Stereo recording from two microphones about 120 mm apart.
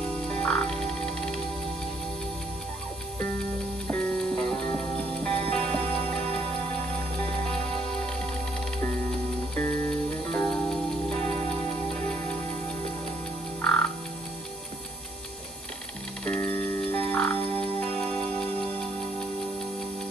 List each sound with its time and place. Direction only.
0.3 s frog: 10° left (ahead or behind)
3.8 s music: 10° left (ahead or behind)
9.6 s music: 15° left (ahead or behind)
13.6 s frog: 10° left (ahead or behind)
16.3 s frog: 20° left (ahead or behind)
17.6 s music: 10° left (ahead or behind)